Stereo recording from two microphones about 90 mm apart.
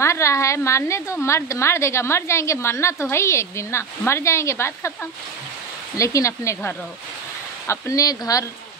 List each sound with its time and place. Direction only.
0.0 s a woman's voice: 30° left (ahead or behind)
5.9 s a woman's voice: 35° left (ahead or behind)